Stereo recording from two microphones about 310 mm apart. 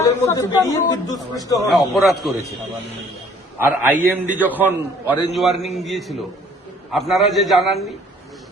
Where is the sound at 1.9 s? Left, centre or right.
Centre.